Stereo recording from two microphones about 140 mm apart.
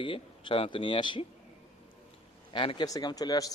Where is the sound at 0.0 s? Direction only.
35° left (ahead or behind).